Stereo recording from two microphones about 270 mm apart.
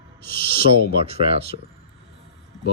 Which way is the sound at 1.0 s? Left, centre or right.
Right.